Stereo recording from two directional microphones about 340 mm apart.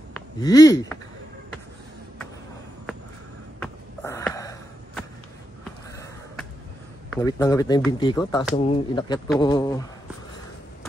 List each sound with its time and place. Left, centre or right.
0.1 s speech: centre
3.5 s a sound: centre
7.1 s a man's voice: centre